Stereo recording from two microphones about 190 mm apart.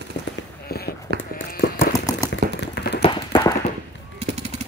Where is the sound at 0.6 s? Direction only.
55° left (ahead or behind).